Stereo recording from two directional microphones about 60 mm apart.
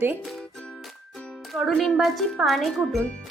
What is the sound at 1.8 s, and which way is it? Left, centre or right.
Speech, centre.